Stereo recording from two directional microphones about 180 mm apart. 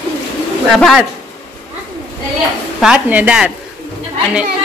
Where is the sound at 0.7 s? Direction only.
Centre (ahead or behind).